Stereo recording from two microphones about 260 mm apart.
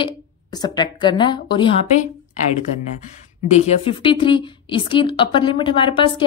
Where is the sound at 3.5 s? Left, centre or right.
Left.